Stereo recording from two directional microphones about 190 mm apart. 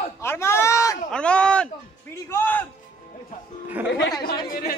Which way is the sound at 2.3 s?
10° left (ahead or behind).